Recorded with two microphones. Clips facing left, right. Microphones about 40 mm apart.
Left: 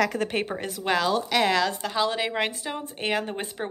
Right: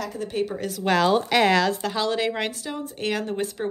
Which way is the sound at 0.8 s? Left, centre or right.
Centre.